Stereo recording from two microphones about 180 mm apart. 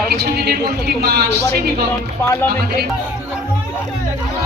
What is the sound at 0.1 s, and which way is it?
A woman's voice, 60° right (ahead or behind).